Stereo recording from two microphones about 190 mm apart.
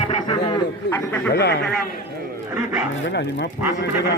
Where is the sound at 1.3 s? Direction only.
60° left (ahead or behind).